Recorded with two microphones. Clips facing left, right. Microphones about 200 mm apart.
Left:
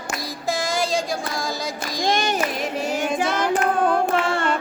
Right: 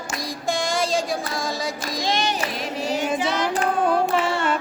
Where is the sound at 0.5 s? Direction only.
Centre (ahead or behind).